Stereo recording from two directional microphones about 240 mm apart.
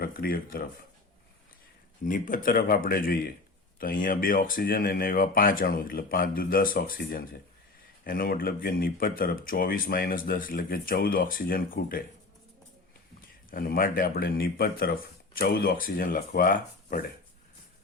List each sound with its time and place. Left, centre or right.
0.0 s speech: left
2.0 s speech: left
13.5 s speech: left